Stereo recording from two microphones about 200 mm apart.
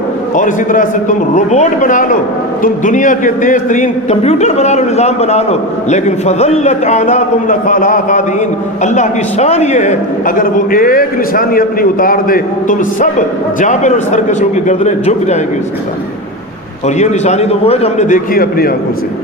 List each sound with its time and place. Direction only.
0.3 s a man's voice: 40° left (ahead or behind)
16.8 s a man's voice: 35° left (ahead or behind)